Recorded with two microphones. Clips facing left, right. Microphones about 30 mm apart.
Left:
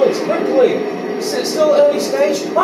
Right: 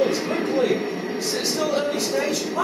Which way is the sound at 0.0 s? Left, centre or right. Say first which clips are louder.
Left 7 dB; centre.